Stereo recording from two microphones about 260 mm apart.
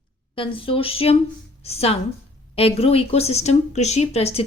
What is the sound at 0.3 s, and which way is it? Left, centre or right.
Speech, centre.